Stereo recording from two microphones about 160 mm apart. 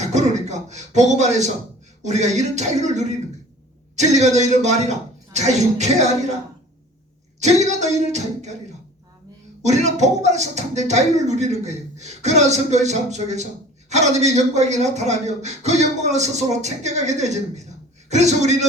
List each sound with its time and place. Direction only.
0.0 s speech: 45° right (ahead or behind)
7.3 s speech: 45° right (ahead or behind)
9.6 s speech: 45° right (ahead or behind)